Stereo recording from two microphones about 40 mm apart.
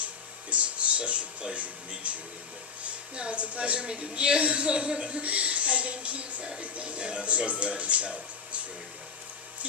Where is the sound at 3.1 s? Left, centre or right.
Right.